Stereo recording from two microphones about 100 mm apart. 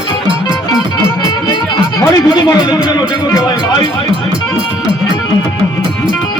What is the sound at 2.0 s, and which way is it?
Speech, 40° left (ahead or behind).